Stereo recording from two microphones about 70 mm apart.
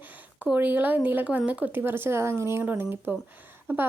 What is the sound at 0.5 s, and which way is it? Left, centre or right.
Speech, right.